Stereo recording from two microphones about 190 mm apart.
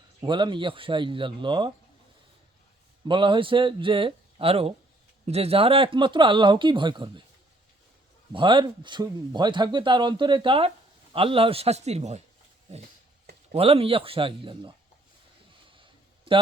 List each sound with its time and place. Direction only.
0.2 s speech: 25° right (ahead or behind)
3.1 s speech: 25° right (ahead or behind)
8.3 s a man's voice: 25° right (ahead or behind)
13.5 s speech: 30° right (ahead or behind)
15.8 s a sound: 25° right (ahead or behind)